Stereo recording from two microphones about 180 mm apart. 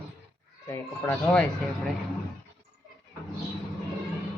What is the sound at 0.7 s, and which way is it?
Speech, 10° left (ahead or behind).